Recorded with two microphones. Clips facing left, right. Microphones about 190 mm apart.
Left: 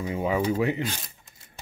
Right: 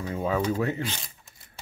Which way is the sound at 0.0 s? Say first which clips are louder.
Left 1 dB; 15° left (ahead or behind).